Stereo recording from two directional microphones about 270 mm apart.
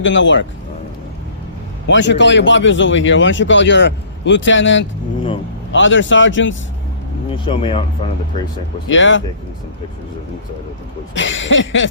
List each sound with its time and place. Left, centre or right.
0.0 s speech: left
1.9 s speech: left
7.3 s speech: centre
8.9 s speech: left
11.1 s speech: left